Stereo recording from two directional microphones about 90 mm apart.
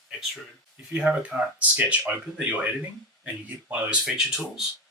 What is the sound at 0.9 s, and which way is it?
Speech, 15° right (ahead or behind).